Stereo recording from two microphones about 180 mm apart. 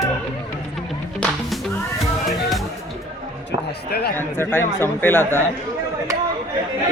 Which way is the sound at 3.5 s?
60° left (ahead or behind).